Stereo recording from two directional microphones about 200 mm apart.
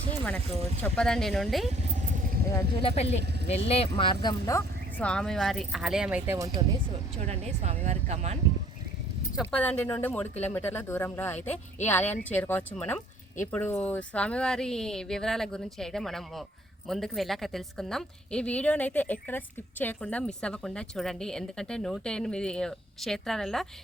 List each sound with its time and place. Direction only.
0.8 s speech: 5° left (ahead or behind)
1.7 s vehicle: 40° right (ahead or behind)
2.8 s speech: 30° left (ahead or behind); by 6.7 s 15° right (ahead or behind)
7.2 s speech: 30° right (ahead or behind)
9.4 s speech: 5° left (ahead or behind)